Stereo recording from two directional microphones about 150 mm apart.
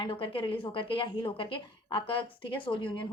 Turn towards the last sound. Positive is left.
turn(degrees=35)  # may be behind; listen again after turning